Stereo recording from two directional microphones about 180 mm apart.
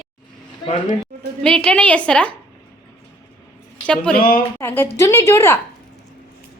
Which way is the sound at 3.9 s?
5° left (ahead or behind).